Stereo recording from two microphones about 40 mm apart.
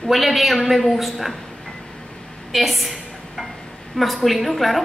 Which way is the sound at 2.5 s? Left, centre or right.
Centre.